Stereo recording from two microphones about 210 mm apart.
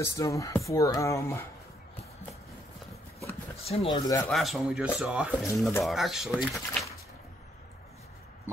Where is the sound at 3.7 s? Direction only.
30° left (ahead or behind).